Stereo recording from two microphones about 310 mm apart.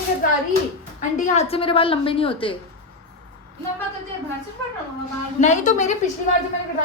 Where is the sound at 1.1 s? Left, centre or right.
Left.